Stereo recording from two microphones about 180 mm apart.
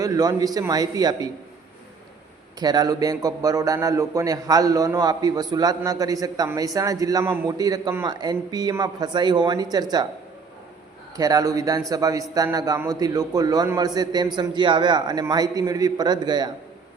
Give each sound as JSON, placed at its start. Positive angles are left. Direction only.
{"t": 0.0, "sound": "a man's voice", "side_deg": -20}
{"t": 2.6, "sound": "a man's voice", "side_deg": -20}
{"t": 11.2, "sound": "a man's voice", "side_deg": -20}